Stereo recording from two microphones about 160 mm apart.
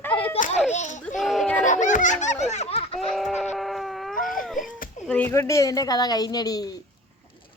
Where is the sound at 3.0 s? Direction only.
Centre (ahead or behind).